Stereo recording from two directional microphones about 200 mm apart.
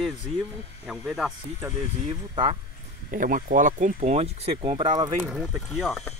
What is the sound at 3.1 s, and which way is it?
Speech, 45° right (ahead or behind).